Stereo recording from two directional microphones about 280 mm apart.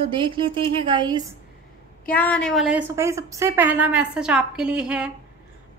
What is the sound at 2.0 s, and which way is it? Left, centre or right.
A woman's voice, centre.